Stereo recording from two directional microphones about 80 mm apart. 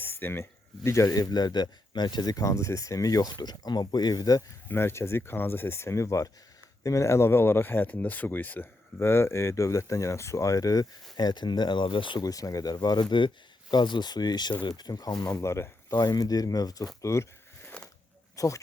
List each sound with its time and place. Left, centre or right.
0.0 s a sound: left
0.9 s speech: left
1.3 s speech: left
3.3 s speech: left
4.7 s speech: left
9.0 s speech: left
12.2 s speech: left
12.7 s speech: left
17.0 s speech: left
17.7 s a sound: centre
18.3 s speech: left